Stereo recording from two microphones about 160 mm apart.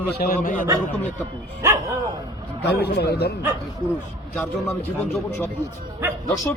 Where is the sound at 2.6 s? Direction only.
90° left.